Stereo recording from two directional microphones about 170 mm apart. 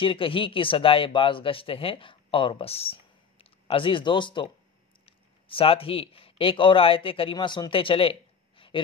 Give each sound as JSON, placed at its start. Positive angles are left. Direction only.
{"t": 0.0, "sound": "speech", "side_deg": 30}